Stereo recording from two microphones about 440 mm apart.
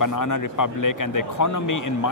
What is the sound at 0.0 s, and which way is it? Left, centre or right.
Speech, left.